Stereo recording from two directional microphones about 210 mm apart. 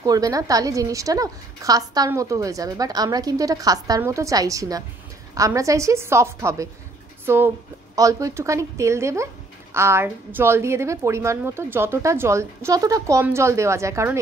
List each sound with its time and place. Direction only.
0.0 s a woman's voice: 15° right (ahead or behind)